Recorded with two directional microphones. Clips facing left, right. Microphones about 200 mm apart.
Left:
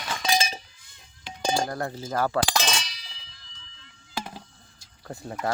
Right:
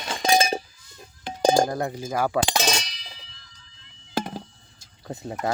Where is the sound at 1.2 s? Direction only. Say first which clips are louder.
Right 7 dB; 45° right (ahead or behind).